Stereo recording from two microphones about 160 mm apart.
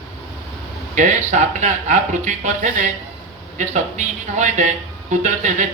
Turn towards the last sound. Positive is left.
turn(degrees=-50)  # may be behind; listen again after turning